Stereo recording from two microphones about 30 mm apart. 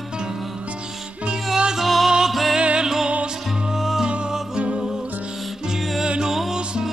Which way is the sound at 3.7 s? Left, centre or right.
Centre.